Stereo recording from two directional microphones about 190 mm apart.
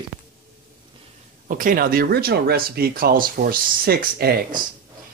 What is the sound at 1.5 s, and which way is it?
Speech, 45° right (ahead or behind).